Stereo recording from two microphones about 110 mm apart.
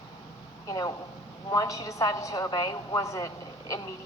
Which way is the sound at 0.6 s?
35° left (ahead or behind).